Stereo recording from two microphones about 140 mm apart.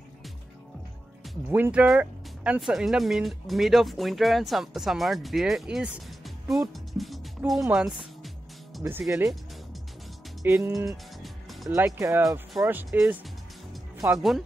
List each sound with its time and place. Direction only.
1.5 s speech: 10° right (ahead or behind)
6.7 s music: centre (ahead or behind)
7.7 s speech: 5° right (ahead or behind)
8.7 s music: centre (ahead or behind)
10.4 s speech: 20° right (ahead or behind)
11.7 s speech: 20° right (ahead or behind)
12.2 s speech: centre (ahead or behind)
12.6 s speech: 15° right (ahead or behind)
14.1 s speech: centre (ahead or behind)